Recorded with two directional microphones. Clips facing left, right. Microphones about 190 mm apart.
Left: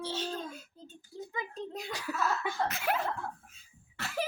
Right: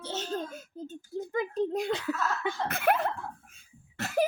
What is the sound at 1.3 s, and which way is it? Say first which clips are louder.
Speech: right 11 dB; 45° right (ahead or behind).